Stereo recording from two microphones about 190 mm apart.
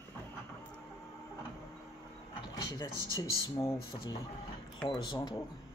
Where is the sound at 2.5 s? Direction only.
20° left (ahead or behind).